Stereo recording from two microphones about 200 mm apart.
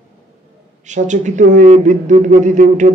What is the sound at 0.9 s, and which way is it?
Speech, 35° right (ahead or behind).